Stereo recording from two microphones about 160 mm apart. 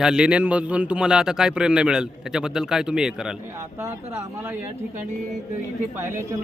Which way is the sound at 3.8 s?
15° right (ahead or behind).